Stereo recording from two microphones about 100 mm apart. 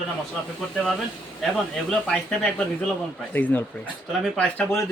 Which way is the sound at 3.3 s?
15° left (ahead or behind).